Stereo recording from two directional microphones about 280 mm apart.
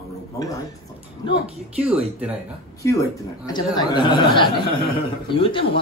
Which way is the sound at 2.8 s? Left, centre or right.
Centre.